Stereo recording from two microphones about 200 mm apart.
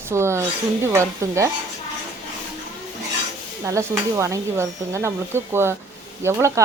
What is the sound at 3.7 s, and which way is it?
A woman's voice, 15° right (ahead or behind).